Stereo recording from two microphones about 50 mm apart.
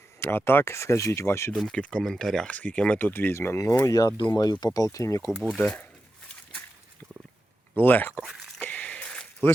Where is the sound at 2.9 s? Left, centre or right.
Left.